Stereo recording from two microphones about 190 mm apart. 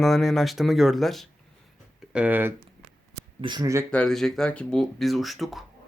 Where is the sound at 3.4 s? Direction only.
25° right (ahead or behind).